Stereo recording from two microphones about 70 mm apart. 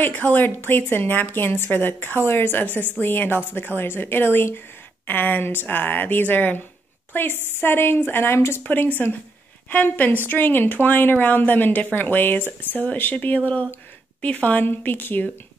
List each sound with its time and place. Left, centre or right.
0.0 s a woman's voice: left
8.6 s a woman's voice: left